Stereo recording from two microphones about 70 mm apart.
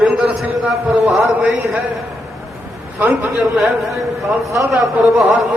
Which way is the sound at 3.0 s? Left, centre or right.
Right.